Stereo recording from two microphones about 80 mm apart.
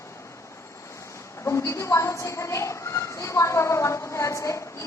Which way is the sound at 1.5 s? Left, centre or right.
Left.